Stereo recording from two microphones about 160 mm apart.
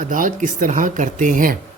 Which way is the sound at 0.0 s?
55° right (ahead or behind).